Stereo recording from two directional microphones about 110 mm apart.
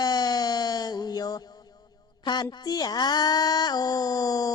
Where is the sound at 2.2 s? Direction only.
40° left (ahead or behind).